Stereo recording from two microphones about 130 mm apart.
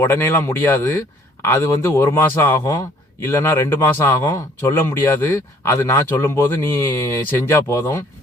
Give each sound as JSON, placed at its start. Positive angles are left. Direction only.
{"t": 0.0, "sound": "speech", "side_deg": 20}